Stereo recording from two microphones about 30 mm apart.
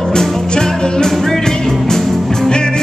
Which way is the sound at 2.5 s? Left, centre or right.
Left.